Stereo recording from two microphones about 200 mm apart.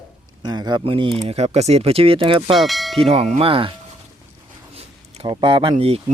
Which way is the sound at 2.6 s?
Centre (ahead or behind).